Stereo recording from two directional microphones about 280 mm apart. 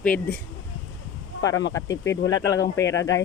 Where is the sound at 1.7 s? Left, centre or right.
Centre.